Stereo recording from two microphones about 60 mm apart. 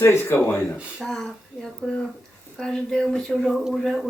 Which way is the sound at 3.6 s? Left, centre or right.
Centre.